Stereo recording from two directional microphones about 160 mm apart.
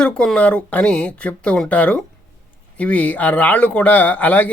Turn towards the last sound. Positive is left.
turn(degrees=10)  # may be behind; listen again after turning